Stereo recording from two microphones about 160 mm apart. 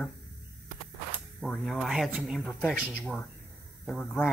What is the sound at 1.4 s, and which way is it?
Speech, 5° left (ahead or behind).